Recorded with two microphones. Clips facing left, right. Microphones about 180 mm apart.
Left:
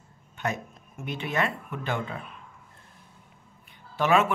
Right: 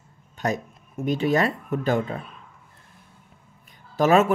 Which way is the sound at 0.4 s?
35° right (ahead or behind).